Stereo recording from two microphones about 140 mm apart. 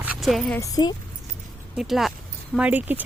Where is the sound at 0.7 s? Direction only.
30° left (ahead or behind).